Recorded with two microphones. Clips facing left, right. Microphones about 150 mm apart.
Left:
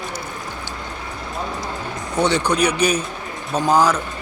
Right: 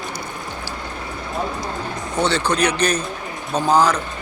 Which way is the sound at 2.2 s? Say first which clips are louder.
Left 1 dB; 15° left (ahead or behind).